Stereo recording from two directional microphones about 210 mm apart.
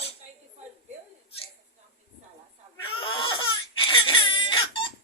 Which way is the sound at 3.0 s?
25° left (ahead or behind).